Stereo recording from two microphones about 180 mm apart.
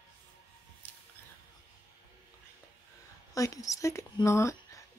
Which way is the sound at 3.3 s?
20° left (ahead or behind).